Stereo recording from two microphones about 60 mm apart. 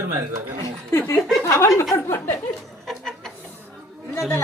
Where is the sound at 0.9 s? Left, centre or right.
Left.